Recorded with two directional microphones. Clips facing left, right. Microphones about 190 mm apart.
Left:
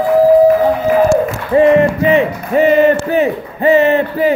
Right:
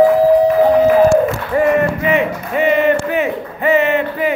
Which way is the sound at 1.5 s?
25° left (ahead or behind).